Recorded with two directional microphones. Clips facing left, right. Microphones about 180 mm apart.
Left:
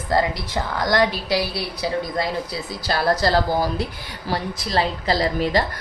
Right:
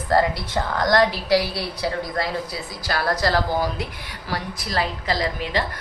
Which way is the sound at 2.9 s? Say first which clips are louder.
Left 3 dB; 25° left (ahead or behind).